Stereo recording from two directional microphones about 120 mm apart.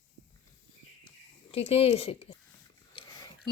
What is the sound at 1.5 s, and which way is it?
Speech, 55° left (ahead or behind).